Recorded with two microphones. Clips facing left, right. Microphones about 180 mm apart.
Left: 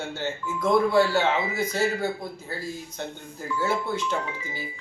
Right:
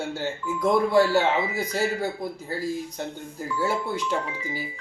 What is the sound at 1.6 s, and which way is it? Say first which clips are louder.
Speech: left 1 dB; 35° right (ahead or behind).